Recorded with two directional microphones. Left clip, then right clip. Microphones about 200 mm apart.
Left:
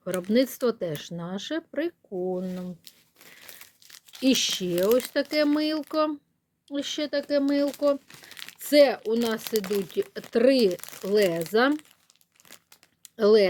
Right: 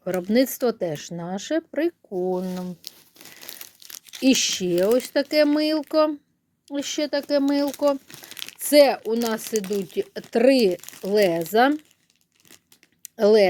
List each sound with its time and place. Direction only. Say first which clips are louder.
0.0 s speech: right 3 dB; 5° right (ahead or behind)
2.0 s speech: right 4 dB; 20° right (ahead or behind)
2.5 s crumpling: right 5 dB; 50° right (ahead or behind)
4.2 s speech: right 3 dB; centre (ahead or behind)
8.0 s crumpling: right 5 dB; 35° right (ahead or behind)
8.5 s a sound: right 3 dB; 5° right (ahead or behind)
9.5 s speech: right 1 dB; centre (ahead or behind)
13.0 s a sound: right 3 dB; centre (ahead or behind)